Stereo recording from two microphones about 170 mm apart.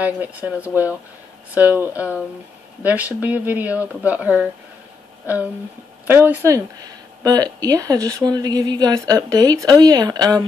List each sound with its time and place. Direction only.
0.0 s speech: 10° right (ahead or behind)
6.0 s speech: 10° right (ahead or behind)